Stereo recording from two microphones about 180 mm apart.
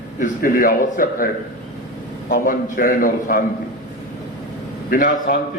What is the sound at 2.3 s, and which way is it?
A man's voice, 50° left (ahead or behind).